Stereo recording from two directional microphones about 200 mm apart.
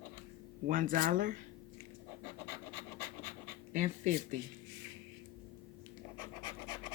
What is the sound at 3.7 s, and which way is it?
Speech, 40° right (ahead or behind).